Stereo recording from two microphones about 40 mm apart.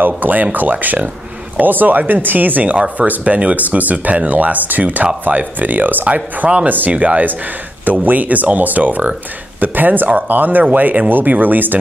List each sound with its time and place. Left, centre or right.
0.0 s speech: right
7.8 s speech: right